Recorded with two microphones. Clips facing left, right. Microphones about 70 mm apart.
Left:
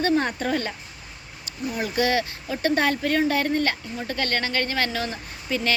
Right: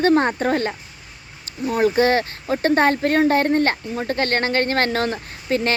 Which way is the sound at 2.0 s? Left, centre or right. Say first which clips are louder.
Right 5 dB; right.